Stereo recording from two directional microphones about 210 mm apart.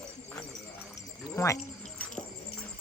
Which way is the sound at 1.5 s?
35° left (ahead or behind).